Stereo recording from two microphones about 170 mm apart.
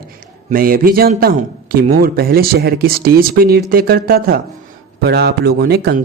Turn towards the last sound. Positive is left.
turn(degrees=-70)  # may be behind; listen again after turning